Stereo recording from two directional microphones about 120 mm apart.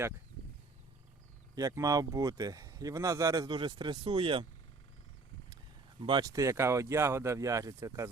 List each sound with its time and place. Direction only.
1.5 s speech: 30° right (ahead or behind)
3.5 s speech: 40° right (ahead or behind)
6.0 s speech: 40° right (ahead or behind)